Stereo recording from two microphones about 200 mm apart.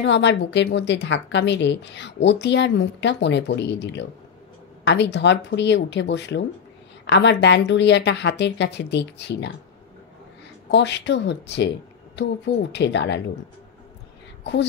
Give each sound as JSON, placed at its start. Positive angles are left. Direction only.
{"t": 0.0, "sound": "a woman's voice", "side_deg": 60}
{"t": 10.7, "sound": "a woman's voice", "side_deg": 60}
{"t": 12.7, "sound": "a woman's voice", "side_deg": 60}